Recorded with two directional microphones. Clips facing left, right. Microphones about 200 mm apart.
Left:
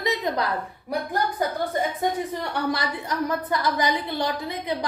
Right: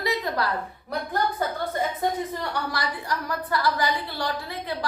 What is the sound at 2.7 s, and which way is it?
A woman's voice, 25° left (ahead or behind).